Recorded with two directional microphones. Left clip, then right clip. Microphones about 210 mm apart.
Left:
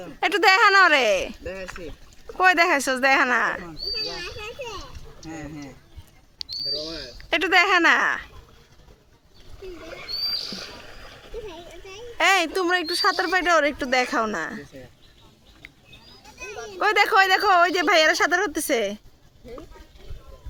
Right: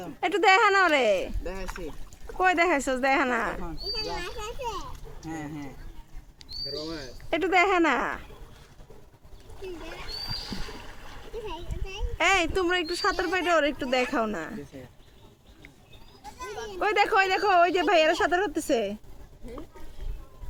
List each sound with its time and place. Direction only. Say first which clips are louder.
0.2 s speech: left 3 dB; 20° left (ahead or behind)
1.5 s speech: left 3 dB; 5° right (ahead or behind)
2.4 s speech: left 5 dB; 20° left (ahead or behind)
3.9 s speech: left 2 dB; 5° right (ahead or behind)
6.7 s speech: left 5 dB; 5° left (ahead or behind)
7.3 s speech: left 4 dB; 15° left (ahead or behind)
10.4 s a sound: left 4 dB; 35° right (ahead or behind)
12.1 s speech: left 4 dB; 35° left (ahead or behind)
16.7 s speech: left 5 dB; 30° left (ahead or behind)